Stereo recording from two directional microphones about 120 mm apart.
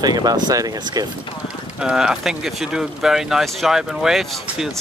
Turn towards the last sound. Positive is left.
turn(degrees=-5)  # may be behind; listen again after turning